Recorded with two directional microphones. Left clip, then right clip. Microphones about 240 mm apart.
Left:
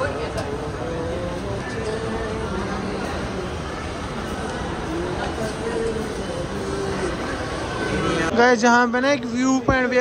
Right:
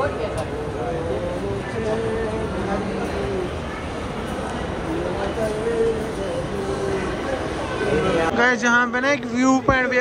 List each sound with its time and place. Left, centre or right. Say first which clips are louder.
8.4 s speech: left 4 dB; centre